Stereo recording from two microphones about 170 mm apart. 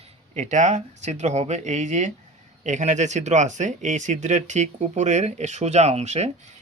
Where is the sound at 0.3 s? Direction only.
45° right (ahead or behind).